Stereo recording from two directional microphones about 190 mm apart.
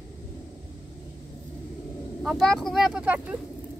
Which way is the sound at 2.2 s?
Centre (ahead or behind).